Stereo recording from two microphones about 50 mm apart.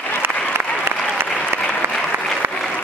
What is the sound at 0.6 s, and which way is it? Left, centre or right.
Applause, right.